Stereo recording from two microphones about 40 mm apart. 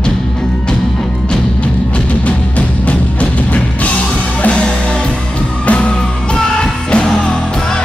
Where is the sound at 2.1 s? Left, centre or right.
Left.